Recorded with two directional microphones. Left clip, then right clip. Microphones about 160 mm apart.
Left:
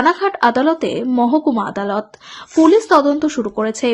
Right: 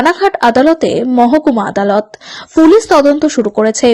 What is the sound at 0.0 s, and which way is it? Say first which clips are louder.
A woman's voice: right 4 dB; 35° right (ahead or behind).